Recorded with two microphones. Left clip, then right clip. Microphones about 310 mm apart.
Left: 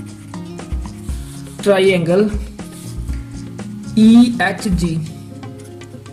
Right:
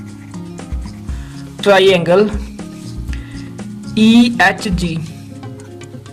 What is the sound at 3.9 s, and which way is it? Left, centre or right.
Speech, right.